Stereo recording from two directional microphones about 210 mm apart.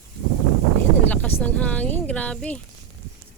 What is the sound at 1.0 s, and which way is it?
Speech, 10° left (ahead or behind).